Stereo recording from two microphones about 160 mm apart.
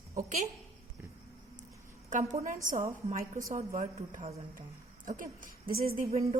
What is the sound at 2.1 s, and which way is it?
A woman's voice, 50° right (ahead or behind).